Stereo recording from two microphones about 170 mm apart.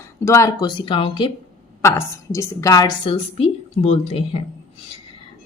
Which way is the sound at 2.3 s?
20° left (ahead or behind).